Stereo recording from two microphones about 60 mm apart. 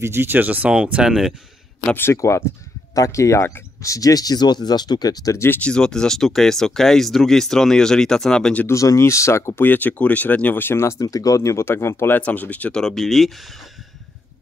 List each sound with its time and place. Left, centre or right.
0.0 s speech: right
0.4 s speech: right
0.7 s speech: centre
2.1 s speech: left
3.8 s speech: left
5.6 s speech: centre
8.6 s speech: left
9.6 s speech: left
11.0 s speech: left
12.1 s speech: left
12.7 s speech: centre